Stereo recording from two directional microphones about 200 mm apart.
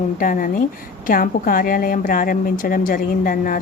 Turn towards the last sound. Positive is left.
turn(degrees=45)  # may be behind; listen again after turning